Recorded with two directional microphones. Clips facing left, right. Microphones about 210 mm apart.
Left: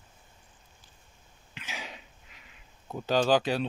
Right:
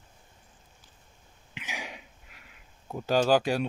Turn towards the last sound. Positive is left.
turn(degrees=-10)  # may be behind; listen again after turning